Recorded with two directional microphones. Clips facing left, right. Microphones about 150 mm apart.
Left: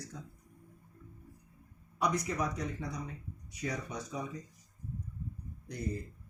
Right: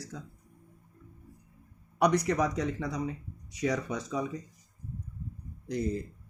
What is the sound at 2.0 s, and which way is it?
Speech, 70° right (ahead or behind).